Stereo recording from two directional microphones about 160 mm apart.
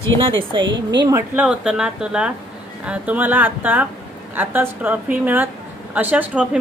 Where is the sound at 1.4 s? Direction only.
5° right (ahead or behind).